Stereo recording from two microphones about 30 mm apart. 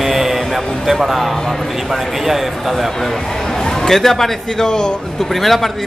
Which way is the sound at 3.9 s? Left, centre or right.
Centre.